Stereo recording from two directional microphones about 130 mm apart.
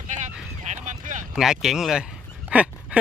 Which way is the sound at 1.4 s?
5° right (ahead or behind).